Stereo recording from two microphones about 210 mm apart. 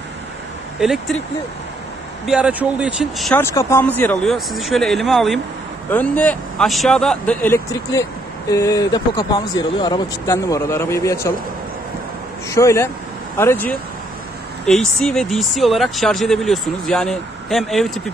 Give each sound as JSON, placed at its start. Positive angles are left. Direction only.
{"t": 0.7, "sound": "speech", "side_deg": 0}
{"t": 2.2, "sound": "speech", "side_deg": -5}
{"t": 3.3, "sound": "speech", "side_deg": 10}
{"t": 12.4, "sound": "speech", "side_deg": 15}